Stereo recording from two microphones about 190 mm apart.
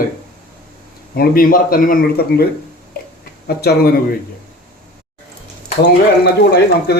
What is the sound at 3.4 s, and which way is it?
Speech, 55° left (ahead or behind).